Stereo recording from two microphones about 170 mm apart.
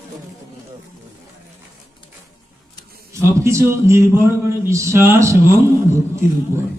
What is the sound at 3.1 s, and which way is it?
A man's voice, 15° right (ahead or behind).